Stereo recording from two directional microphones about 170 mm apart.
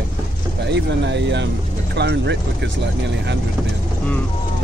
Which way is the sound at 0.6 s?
90° right.